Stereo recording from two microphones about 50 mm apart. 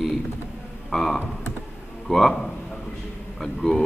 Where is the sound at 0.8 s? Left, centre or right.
Centre.